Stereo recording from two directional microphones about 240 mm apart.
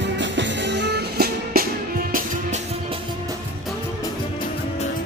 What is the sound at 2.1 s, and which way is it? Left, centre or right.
Music, right.